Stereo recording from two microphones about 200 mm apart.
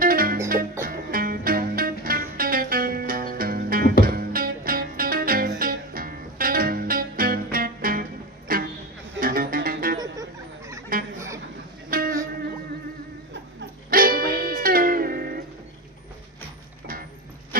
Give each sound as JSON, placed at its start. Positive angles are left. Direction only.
{"t": 0.0, "sound": "music", "side_deg": -45}
{"t": 10.9, "sound": "fowl", "side_deg": -45}
{"t": 11.9, "sound": "music", "side_deg": -45}
{"t": 13.9, "sound": "music", "side_deg": -45}
{"t": 17.5, "sound": "dog", "side_deg": -45}